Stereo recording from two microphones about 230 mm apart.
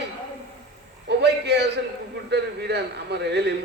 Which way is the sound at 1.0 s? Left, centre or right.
Right.